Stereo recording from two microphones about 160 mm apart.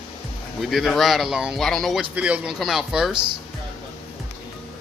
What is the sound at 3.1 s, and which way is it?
Speech, 30° right (ahead or behind).